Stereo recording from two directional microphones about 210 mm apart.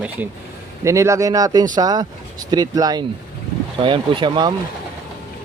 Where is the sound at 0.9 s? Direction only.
15° right (ahead or behind).